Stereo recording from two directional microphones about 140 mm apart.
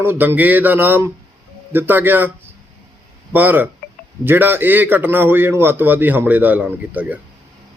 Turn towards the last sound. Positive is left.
turn(degrees=-10)  # may be behind; listen again after turning